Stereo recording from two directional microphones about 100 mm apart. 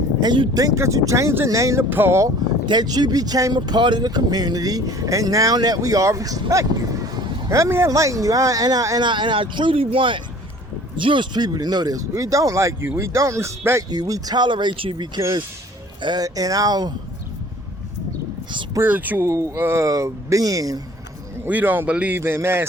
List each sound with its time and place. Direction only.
0.2 s speech: 45° right (ahead or behind); by 2.3 s 25° right (ahead or behind)
2.6 s speech: 45° right (ahead or behind)
9.0 s speech: 55° right (ahead or behind); by 13.8 s 30° right (ahead or behind)
13.9 s speech: 40° right (ahead or behind)
16.2 s speech: 35° right (ahead or behind)
18.8 s speech: 15° right (ahead or behind)
19.3 s speech: 30° right (ahead or behind)
21.4 s speech: 15° right (ahead or behind)
22.2 s speech: 25° right (ahead or behind)